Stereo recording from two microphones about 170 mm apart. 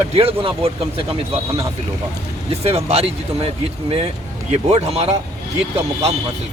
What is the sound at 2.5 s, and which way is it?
Speech, 35° right (ahead or behind).